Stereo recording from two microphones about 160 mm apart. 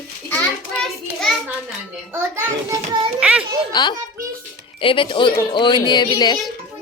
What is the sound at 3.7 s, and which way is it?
Speech, 25° left (ahead or behind).